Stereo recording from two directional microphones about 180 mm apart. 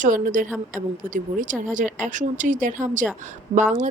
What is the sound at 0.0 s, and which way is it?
Speech, 45° right (ahead or behind).